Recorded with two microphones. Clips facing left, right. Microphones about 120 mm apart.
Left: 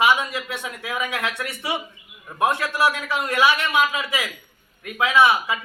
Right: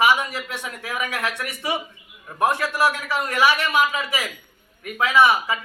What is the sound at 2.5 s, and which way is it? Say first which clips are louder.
Speech: right 1 dB; 10° right (ahead or behind).